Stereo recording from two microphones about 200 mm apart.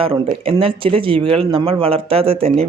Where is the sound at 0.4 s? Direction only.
25° right (ahead or behind).